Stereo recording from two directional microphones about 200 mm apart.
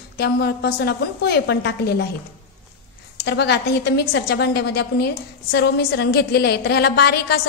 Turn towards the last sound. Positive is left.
turn(degrees=55)  # may be behind; listen again after turning